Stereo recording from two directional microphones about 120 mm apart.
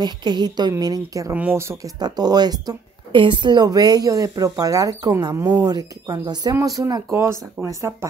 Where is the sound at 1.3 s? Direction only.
15° right (ahead or behind).